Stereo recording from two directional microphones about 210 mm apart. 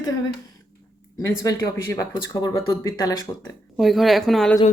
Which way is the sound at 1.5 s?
15° left (ahead or behind).